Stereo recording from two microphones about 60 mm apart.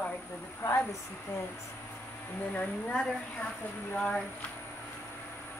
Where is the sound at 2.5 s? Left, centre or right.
Left.